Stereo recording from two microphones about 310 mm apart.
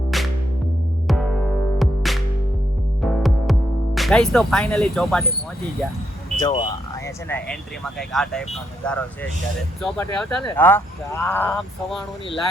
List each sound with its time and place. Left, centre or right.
0.1 s music: centre
6.4 s speech: centre